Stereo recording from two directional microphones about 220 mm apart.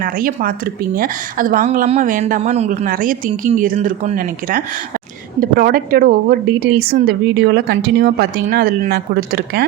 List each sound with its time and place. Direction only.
0.0 s a woman's voice: 40° right (ahead or behind)